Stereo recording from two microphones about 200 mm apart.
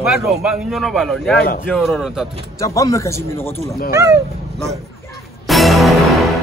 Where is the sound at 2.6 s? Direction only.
15° left (ahead or behind).